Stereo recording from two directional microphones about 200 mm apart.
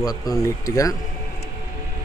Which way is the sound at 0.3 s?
15° left (ahead or behind).